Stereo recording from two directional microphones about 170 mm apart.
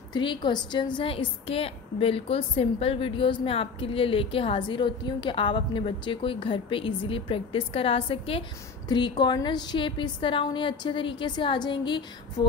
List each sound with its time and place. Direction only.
0.1 s a woman's voice: 30° left (ahead or behind)